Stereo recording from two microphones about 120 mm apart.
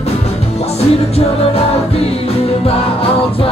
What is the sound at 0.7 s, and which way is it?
Music, 55° left (ahead or behind).